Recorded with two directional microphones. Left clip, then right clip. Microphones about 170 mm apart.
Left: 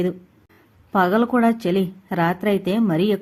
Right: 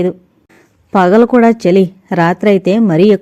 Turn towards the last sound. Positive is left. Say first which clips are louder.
# right 11 dB
turn(degrees=-35)  # may be behind; listen again after turning